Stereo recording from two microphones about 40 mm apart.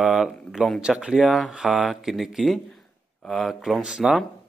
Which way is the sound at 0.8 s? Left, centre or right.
Right.